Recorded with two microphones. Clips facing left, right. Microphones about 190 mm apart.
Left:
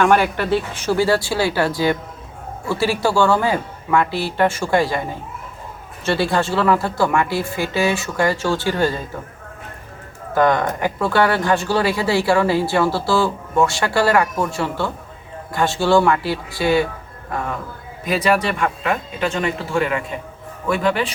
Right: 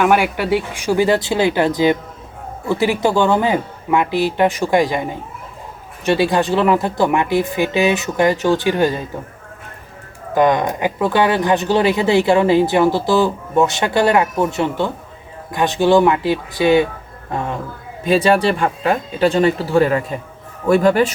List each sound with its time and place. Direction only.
0.0 s speech: 10° right (ahead or behind)
10.3 s a man's voice: 15° right (ahead or behind); by 21.1 s 45° right (ahead or behind)